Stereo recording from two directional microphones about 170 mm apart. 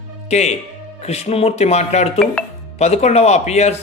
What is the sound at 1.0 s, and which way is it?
Speech, 40° left (ahead or behind).